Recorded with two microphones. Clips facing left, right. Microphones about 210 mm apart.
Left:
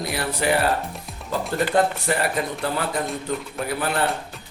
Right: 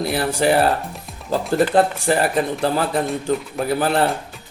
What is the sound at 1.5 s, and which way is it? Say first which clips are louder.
Speech: right 4 dB; 30° right (ahead or behind).